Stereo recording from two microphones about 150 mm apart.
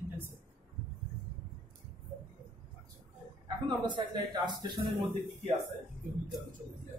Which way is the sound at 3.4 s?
30° right (ahead or behind).